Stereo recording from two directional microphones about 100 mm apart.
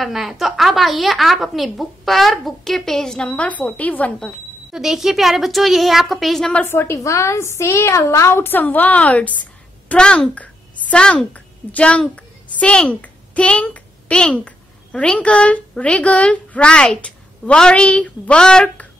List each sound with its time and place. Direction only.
0.0 s a woman's voice: centre (ahead or behind)
4.7 s a woman's voice: 5° right (ahead or behind)
6.6 s a woman's voice: 25° left (ahead or behind); by 18.9 s 10° left (ahead or behind)